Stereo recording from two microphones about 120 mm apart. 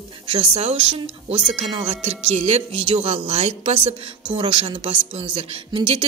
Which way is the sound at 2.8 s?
45° right (ahead or behind).